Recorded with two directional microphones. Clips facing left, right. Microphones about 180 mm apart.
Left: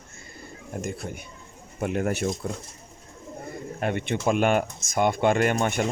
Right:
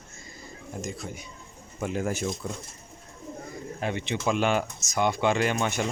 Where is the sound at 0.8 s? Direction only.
60° left (ahead or behind).